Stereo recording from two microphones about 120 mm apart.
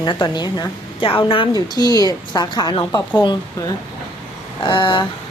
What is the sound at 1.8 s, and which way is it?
A woman's voice, 30° left (ahead or behind).